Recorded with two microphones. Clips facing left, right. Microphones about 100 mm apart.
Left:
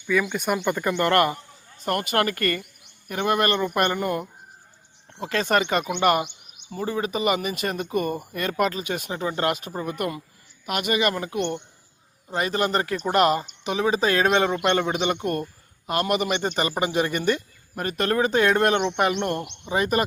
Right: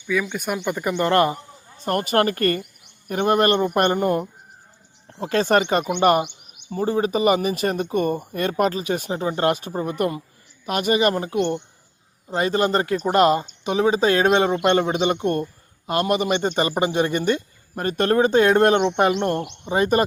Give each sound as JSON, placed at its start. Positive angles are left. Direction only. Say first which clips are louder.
{"t": 0.1, "sound": "speech", "louder": "left 1 dB", "side_deg": 0}
{"t": 0.8, "sound": "speech", "louder": "right 4 dB", "side_deg": -15}
{"t": 1.8, "sound": "speech", "louder": "right 3 dB", "side_deg": -35}
{"t": 5.2, "sound": "speech", "louder": "right 4 dB", "side_deg": -35}